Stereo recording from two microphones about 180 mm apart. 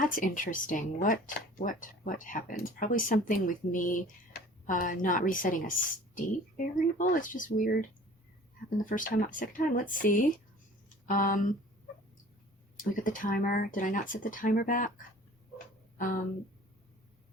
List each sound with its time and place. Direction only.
0.0 s speech: 50° left (ahead or behind)
12.7 s speech: 50° left (ahead or behind)